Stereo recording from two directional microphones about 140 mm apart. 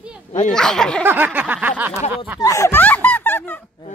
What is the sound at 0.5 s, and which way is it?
Speech, 5° left (ahead or behind).